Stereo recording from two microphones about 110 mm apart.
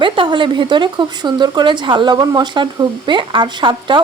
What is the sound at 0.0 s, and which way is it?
Speech, 50° right (ahead or behind).